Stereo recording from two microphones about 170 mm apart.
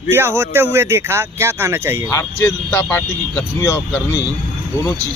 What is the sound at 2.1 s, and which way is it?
Speech, 20° left (ahead or behind).